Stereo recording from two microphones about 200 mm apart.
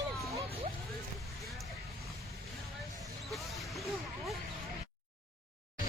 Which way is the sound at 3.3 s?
Centre (ahead or behind).